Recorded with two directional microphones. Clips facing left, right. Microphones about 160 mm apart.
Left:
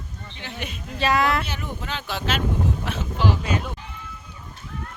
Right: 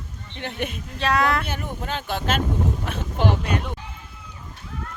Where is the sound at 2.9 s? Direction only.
55° right (ahead or behind).